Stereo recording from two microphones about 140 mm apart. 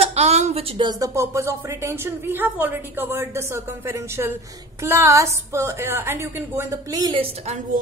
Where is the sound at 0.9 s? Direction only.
20° right (ahead or behind).